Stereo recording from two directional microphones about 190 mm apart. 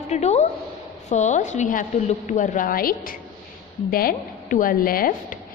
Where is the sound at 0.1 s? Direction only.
35° left (ahead or behind).